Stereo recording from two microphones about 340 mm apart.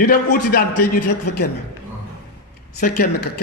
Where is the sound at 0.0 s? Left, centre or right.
Left.